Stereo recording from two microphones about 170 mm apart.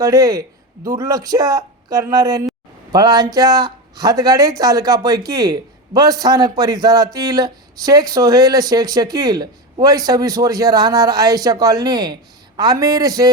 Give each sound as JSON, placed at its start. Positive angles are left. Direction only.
{"t": 0.0, "sound": "speech", "side_deg": -20}